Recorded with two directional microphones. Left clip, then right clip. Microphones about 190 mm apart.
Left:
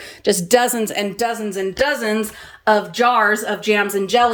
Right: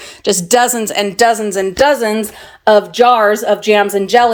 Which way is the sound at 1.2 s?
15° right (ahead or behind).